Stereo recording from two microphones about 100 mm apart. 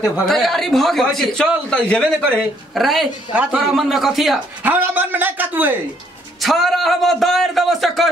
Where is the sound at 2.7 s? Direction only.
Centre (ahead or behind).